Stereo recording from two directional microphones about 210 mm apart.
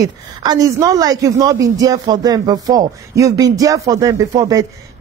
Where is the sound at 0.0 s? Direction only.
20° right (ahead or behind).